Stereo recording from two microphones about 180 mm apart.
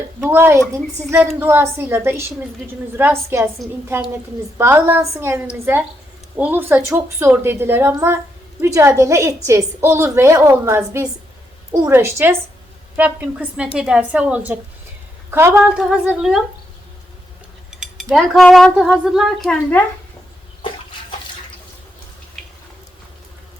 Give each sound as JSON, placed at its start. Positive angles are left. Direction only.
{"t": 0.3, "sound": "a woman's voice", "side_deg": -15}
{"t": 4.5, "sound": "a woman's voice", "side_deg": -10}
{"t": 17.7, "sound": "cutlery", "side_deg": -5}
{"t": 18.1, "sound": "speech", "side_deg": 0}
{"t": 22.4, "sound": "a sound", "side_deg": 0}